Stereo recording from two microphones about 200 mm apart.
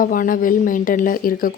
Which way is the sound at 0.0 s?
45° left (ahead or behind).